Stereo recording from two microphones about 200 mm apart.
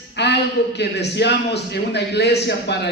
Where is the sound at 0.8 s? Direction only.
55° left (ahead or behind).